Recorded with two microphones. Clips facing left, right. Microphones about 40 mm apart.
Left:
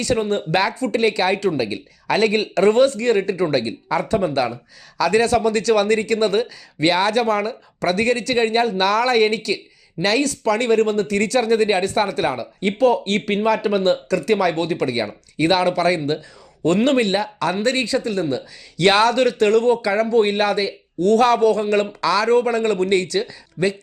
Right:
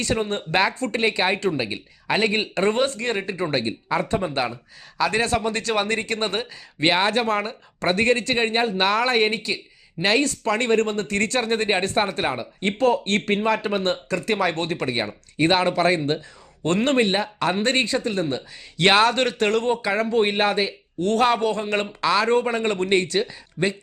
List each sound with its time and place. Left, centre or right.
0.0 s speech: right
8.4 s speech: centre
12.6 s speech: right
19.1 s speech: right